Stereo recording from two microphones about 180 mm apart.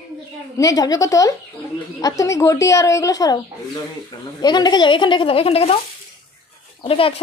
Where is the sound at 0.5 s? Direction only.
20° left (ahead or behind); by 5.8 s 35° left (ahead or behind).